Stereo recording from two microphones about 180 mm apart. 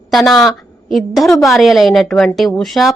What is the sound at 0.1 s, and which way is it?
Speech, centre (ahead or behind).